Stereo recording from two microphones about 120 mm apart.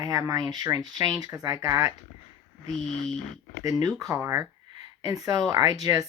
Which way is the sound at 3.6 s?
30° right (ahead or behind).